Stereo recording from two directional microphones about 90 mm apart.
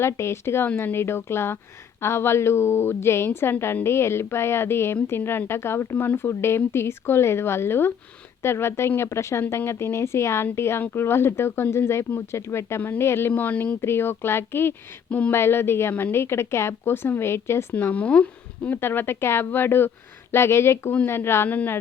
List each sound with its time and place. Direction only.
0.0 s speech: 30° left (ahead or behind)